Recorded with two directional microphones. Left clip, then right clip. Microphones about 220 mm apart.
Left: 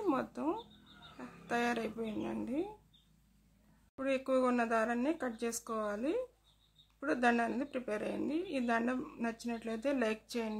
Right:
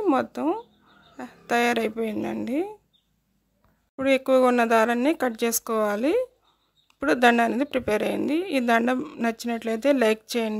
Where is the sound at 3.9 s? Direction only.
40° right (ahead or behind).